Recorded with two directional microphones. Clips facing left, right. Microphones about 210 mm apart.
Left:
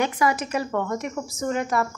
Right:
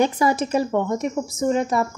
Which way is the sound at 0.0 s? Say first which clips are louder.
Right 4 dB; 30° right (ahead or behind).